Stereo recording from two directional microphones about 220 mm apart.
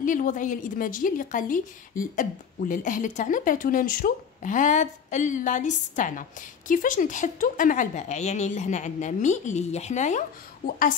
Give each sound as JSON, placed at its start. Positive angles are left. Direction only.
{"t": 0.0, "sound": "a woman's voice", "side_deg": 35}